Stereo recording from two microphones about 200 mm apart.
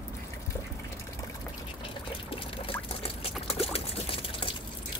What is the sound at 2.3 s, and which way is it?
Pour, 30° left (ahead or behind).